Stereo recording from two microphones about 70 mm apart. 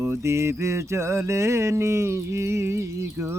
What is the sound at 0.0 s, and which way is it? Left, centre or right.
Mantra, right.